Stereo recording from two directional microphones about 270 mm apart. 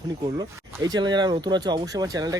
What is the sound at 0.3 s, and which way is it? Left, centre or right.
Speech, centre.